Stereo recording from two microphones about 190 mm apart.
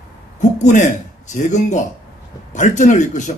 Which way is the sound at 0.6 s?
40° left (ahead or behind).